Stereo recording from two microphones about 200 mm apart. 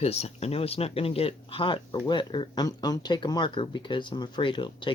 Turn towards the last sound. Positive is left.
turn(degrees=25)  # may be behind; listen again after turning